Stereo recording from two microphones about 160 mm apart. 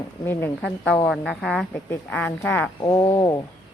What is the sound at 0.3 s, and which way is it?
Speech, 15° left (ahead or behind).